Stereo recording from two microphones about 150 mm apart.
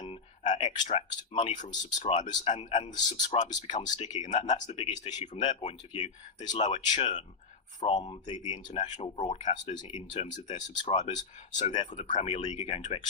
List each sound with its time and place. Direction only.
0.0 s a sound: 50° left (ahead or behind)
1.8 s speech: 50° left (ahead or behind)
3.8 s speech: 30° left (ahead or behind)
4.1 s speech: 50° left (ahead or behind)
5.3 s speech: 40° left (ahead or behind)
7.9 s speech: 30° left (ahead or behind)
8.3 s speech: 45° left (ahead or behind)
12.3 s speech: 40° left (ahead or behind)